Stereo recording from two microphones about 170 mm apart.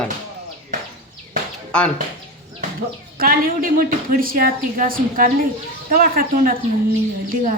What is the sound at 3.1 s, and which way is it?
A woman's voice, 60° right (ahead or behind).